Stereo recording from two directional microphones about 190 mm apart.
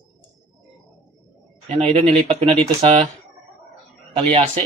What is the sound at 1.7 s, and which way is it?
Speech, 35° right (ahead or behind).